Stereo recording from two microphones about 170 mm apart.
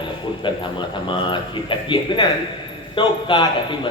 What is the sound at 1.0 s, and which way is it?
A man's voice, 30° left (ahead or behind).